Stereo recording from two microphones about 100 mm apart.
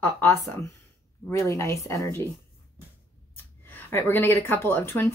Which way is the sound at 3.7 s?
20° left (ahead or behind).